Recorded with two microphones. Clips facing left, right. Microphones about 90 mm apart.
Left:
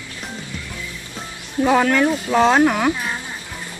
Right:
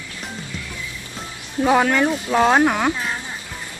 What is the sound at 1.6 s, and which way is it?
Speech, 10° right (ahead or behind).